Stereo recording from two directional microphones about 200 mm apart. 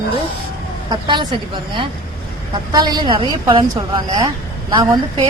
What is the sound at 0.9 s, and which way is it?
Speech, 20° right (ahead or behind).